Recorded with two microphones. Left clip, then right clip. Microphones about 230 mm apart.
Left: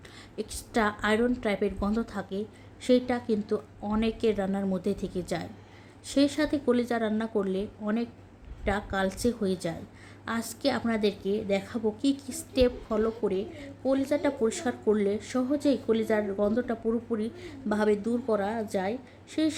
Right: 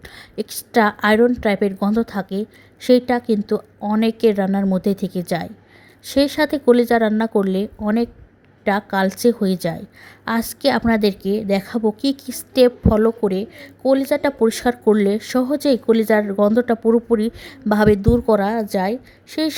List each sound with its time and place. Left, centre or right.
0.0 s a woman's voice: right